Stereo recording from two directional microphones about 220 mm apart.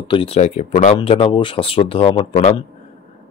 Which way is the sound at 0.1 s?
25° left (ahead or behind).